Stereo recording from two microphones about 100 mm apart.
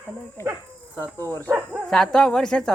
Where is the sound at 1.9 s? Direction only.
5° left (ahead or behind).